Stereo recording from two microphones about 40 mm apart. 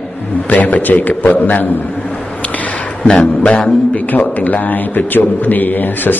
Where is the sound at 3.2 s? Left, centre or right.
Left.